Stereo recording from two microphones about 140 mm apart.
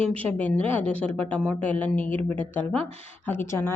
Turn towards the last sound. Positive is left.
turn(degrees=15)  # may be behind; listen again after turning